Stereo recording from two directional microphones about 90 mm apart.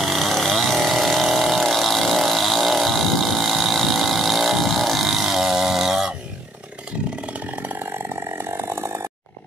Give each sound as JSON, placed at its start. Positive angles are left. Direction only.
{"t": 0.0, "sound": "a sound", "side_deg": 0}
{"t": 7.3, "sound": "chainsaw", "side_deg": -20}
{"t": 8.4, "sound": "chainsaw", "side_deg": -30}